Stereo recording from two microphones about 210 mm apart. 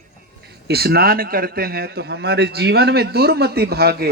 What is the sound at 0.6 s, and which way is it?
A man's voice, 50° right (ahead or behind).